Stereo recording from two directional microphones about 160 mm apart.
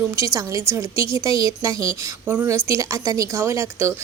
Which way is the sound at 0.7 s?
20° right (ahead or behind).